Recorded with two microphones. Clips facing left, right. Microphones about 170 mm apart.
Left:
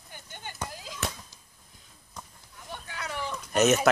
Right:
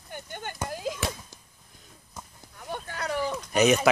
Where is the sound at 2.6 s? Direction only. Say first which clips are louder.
Right 6 dB; 45° right (ahead or behind).